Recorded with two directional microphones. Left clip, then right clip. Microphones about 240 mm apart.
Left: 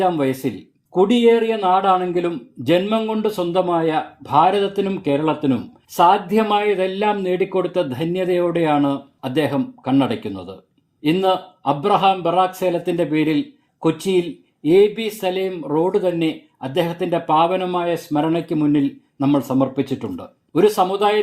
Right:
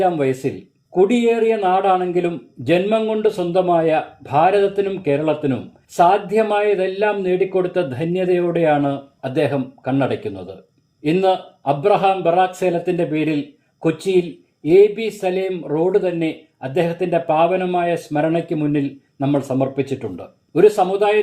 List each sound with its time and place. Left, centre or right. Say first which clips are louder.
0.0 s speech: right 1 dB; left
14.6 s speech: right 2 dB; left